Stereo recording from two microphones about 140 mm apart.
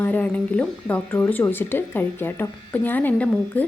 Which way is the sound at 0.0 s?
10° left (ahead or behind).